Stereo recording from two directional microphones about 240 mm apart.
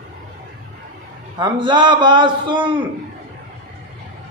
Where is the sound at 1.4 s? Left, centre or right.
Centre.